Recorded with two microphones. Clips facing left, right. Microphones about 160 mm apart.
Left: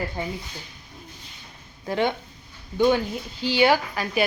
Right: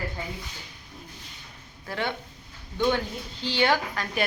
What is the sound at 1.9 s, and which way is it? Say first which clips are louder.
Speech: left 7 dB; 20° left (ahead or behind).